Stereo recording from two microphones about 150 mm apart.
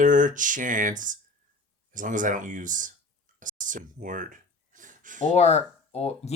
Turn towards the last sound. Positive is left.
turn(degrees=45)  # may be behind; listen again after turning